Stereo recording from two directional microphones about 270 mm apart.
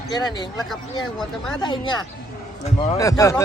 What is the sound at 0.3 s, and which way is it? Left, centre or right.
Speech, centre.